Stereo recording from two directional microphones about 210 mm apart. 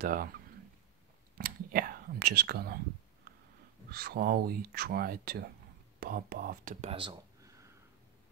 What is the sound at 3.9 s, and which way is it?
Speech, 45° right (ahead or behind).